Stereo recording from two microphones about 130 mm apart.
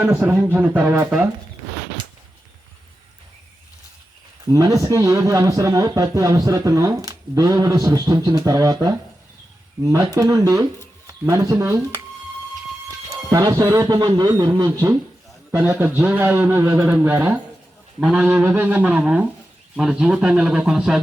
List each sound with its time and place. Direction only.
0.3 s a man's voice: 10° right (ahead or behind)
4.5 s speech: 25° right (ahead or behind)
13.1 s a man's voice: 25° right (ahead or behind); by 21.0 s 5° right (ahead or behind)